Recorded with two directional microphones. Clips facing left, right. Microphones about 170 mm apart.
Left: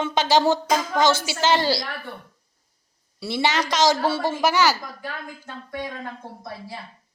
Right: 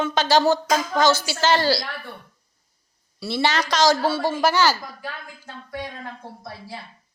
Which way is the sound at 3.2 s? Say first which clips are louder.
Even; 15° left (ahead or behind).